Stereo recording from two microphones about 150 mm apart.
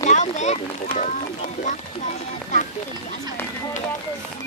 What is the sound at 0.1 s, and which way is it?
Speech, 50° left (ahead or behind).